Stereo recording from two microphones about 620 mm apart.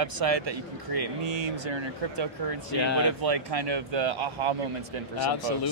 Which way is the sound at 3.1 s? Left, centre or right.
Right.